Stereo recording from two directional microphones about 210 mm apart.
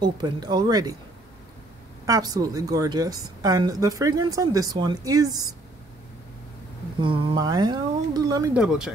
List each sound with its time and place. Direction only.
0.0 s speech: 20° right (ahead or behind)
2.0 s a woman's voice: 15° right (ahead or behind)
7.0 s speech: 20° right (ahead or behind)
8.5 s speech: 5° right (ahead or behind)